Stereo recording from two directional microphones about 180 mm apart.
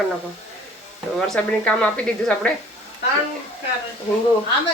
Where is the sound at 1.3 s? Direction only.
5° left (ahead or behind).